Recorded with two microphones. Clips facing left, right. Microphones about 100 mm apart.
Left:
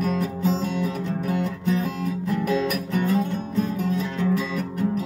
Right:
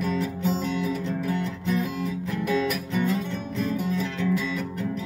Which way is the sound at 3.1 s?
35° left (ahead or behind).